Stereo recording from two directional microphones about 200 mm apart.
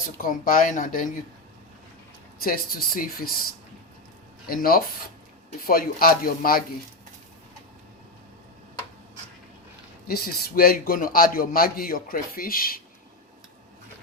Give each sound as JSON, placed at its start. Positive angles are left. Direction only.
{"t": 0.0, "sound": "a man's voice", "side_deg": 45}
{"t": 2.4, "sound": "a man's voice", "side_deg": 45}
{"t": 4.4, "sound": "a man's voice", "side_deg": 45}
{"t": 10.1, "sound": "a man's voice", "side_deg": 50}